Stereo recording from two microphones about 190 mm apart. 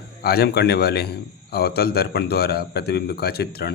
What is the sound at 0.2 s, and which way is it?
A man's voice, 55° left (ahead or behind).